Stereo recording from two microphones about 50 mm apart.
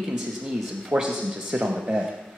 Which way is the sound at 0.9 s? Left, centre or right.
Right.